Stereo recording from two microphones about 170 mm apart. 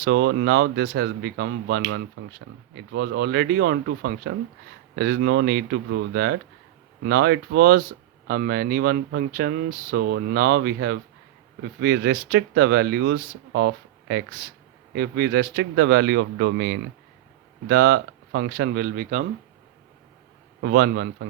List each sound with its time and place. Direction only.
0.0 s speech: 90° right
2.2 s speech: 75° right (ahead or behind)
2.9 s speech: 85° right
14.9 s speech: 85° right
17.7 s speech: 75° right (ahead or behind); by 19.3 s 55° right (ahead or behind)
20.6 s speech: 80° right